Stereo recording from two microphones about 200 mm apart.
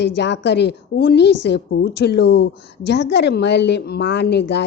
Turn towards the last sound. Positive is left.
turn(degrees=60)  # may be behind; listen again after turning